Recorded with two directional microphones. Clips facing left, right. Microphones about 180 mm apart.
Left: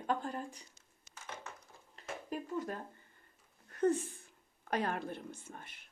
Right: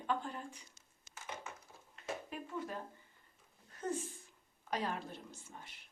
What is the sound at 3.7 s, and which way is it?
A woman's voice, 65° left (ahead or behind).